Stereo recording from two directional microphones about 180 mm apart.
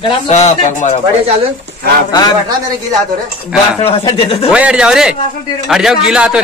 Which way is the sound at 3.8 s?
35° left (ahead or behind).